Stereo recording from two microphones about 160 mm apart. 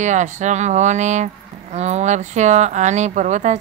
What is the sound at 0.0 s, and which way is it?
Speech, 50° right (ahead or behind).